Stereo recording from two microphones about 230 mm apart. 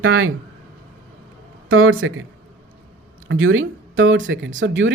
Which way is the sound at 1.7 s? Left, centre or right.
Right.